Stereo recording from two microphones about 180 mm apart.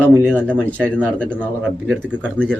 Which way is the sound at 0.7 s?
5° left (ahead or behind).